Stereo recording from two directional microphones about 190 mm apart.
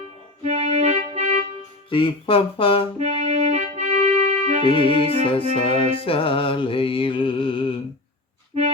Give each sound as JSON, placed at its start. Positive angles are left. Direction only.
{"t": 0.4, "sound": "music", "side_deg": -35}
{"t": 1.9, "sound": "music", "side_deg": 25}
{"t": 3.0, "sound": "music", "side_deg": -35}
{"t": 4.6, "sound": "music", "side_deg": 25}